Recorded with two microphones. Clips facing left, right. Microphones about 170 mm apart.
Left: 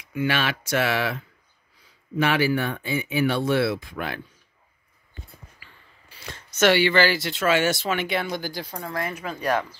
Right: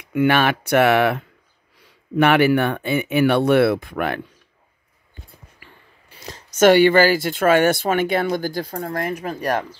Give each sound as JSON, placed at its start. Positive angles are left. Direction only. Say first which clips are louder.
{"t": 0.0, "sound": "speech", "louder": "right 8 dB", "side_deg": -60}
{"t": 6.1, "sound": "speech", "louder": "right 6 dB", "side_deg": -40}